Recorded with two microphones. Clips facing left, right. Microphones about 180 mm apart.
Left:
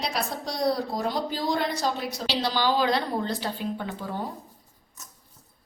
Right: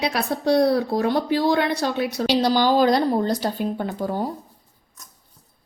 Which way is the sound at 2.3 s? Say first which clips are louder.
Right 7 dB; 45° right (ahead or behind).